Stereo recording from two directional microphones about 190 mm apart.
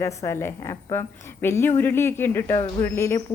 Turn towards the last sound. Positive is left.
turn(degrees=15)  # may be behind; listen again after turning